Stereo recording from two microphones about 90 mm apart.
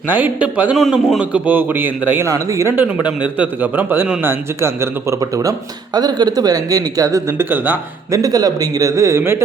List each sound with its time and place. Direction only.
0.1 s a man's voice: 15° right (ahead or behind)
2.2 s speech: 35° right (ahead or behind)
3.3 s a man's voice: 20° right (ahead or behind)
8.1 s speech: 45° right (ahead or behind)